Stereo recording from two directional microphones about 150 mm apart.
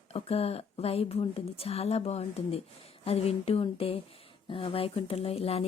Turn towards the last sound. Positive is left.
turn(degrees=40)  # may be behind; listen again after turning